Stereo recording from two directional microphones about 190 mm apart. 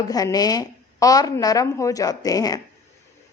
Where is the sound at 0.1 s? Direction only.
20° left (ahead or behind).